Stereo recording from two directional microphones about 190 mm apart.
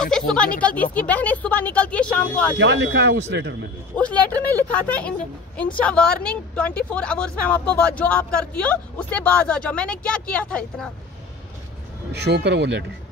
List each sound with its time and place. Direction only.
0.1 s a sound: 5° left (ahead or behind)
0.6 s a woman's voice: 5° left (ahead or behind)
2.6 s speech: 75° right (ahead or behind)
3.9 s a woman's voice: 5° left (ahead or behind)
12.1 s speech: 60° right (ahead or behind)